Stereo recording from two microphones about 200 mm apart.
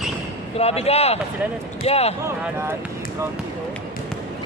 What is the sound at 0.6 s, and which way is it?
Speech, 30° left (ahead or behind).